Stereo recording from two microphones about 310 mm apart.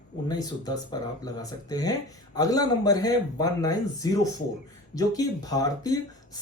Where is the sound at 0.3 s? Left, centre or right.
Centre.